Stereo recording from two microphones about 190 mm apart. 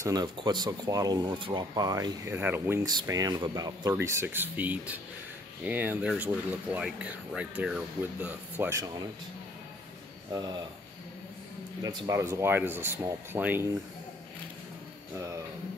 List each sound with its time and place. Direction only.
0.0 s speech: 20° right (ahead or behind)
10.3 s speech: 20° right (ahead or behind)
11.8 s speech: 15° right (ahead or behind)